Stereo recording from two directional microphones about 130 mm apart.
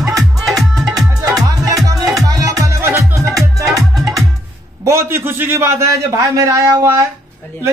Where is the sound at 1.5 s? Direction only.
30° right (ahead or behind).